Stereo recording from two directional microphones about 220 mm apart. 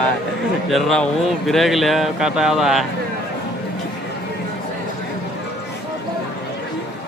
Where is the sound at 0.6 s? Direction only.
Centre (ahead or behind).